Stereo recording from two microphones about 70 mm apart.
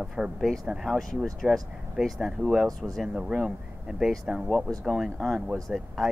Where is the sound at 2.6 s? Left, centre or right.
Centre.